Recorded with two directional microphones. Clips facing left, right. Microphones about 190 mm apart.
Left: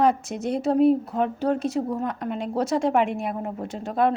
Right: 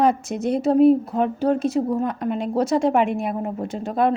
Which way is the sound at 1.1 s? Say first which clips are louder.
Right 3 dB; 20° right (ahead or behind).